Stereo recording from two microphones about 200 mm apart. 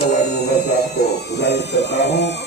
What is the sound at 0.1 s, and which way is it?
Music, 55° left (ahead or behind).